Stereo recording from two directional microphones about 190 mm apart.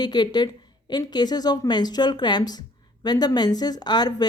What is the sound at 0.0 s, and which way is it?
Speech, 20° left (ahead or behind).